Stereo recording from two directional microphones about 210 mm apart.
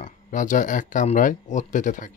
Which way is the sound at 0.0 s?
35° left (ahead or behind).